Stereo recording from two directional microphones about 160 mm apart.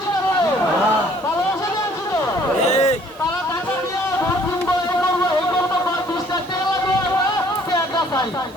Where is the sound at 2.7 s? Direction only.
45° left (ahead or behind).